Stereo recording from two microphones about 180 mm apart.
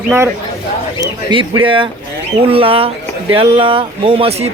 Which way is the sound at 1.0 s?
30° right (ahead or behind).